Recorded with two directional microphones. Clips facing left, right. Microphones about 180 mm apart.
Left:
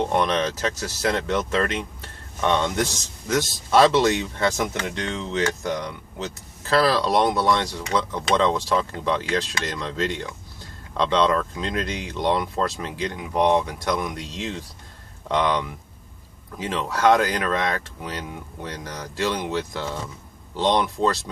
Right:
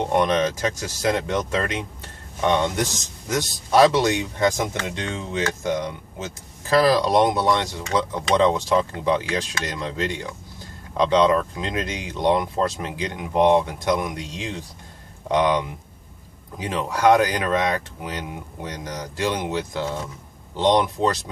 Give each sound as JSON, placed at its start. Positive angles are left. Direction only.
{"t": 0.0, "sound": "speech", "side_deg": -15}